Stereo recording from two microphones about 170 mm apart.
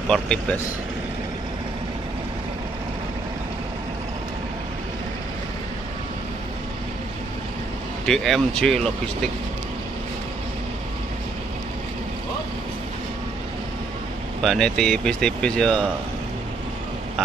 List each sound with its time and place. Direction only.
0.1 s speech: 5° left (ahead or behind)
8.0 s speech: centre (ahead or behind)
14.4 s speech: centre (ahead or behind)